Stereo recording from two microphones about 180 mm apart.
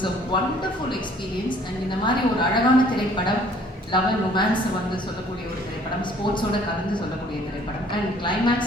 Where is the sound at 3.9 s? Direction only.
25° left (ahead or behind).